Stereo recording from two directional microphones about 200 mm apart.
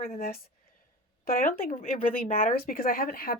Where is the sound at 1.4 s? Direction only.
45° left (ahead or behind).